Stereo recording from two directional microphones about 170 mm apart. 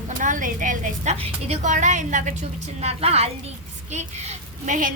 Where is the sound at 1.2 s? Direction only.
40° right (ahead or behind).